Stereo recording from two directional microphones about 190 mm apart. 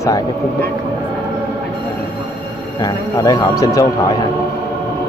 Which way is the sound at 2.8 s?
20° left (ahead or behind).